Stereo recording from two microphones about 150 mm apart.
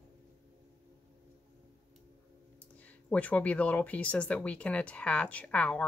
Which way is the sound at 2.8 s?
10° left (ahead or behind).